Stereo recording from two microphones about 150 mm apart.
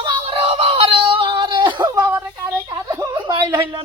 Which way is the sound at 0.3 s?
45° right (ahead or behind).